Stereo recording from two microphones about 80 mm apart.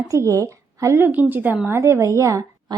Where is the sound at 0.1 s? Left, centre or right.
Right.